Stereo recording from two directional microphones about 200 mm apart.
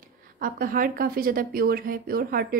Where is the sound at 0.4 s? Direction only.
45° right (ahead or behind).